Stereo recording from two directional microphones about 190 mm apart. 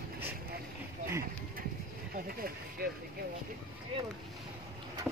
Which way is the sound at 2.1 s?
50° right (ahead or behind).